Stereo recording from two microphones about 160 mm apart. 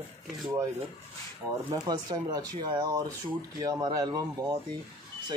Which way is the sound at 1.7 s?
25° right (ahead or behind).